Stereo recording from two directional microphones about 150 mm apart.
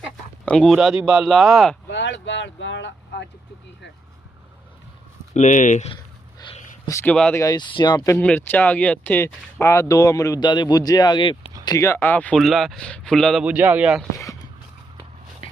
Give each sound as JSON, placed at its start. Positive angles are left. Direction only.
{"t": 0.4, "sound": "speech", "side_deg": 5}
{"t": 5.3, "sound": "speech", "side_deg": 55}
{"t": 7.0, "sound": "speech", "side_deg": 10}
{"t": 7.3, "sound": "speech", "side_deg": 25}
{"t": 8.1, "sound": "speech", "side_deg": 10}
{"t": 11.6, "sound": "speech", "side_deg": 20}
{"t": 13.4, "sound": "a man's voice", "side_deg": -10}
{"t": 14.1, "sound": "a sound", "side_deg": 20}